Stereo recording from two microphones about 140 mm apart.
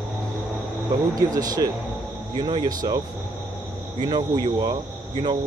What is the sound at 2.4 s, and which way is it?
Speech, 35° right (ahead or behind).